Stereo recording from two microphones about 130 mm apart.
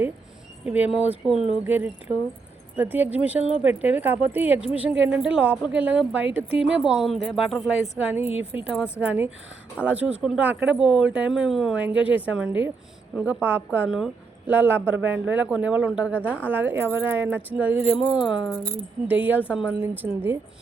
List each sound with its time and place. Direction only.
0.6 s a woman's voice: 10° right (ahead or behind)
16.2 s a woman's voice: 10° left (ahead or behind)
16.5 s a woman's voice: 15° right (ahead or behind)